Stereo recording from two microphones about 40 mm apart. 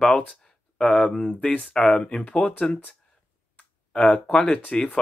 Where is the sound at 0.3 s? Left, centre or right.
Left.